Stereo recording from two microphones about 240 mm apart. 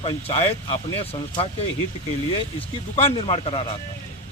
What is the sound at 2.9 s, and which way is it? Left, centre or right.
Speech, left.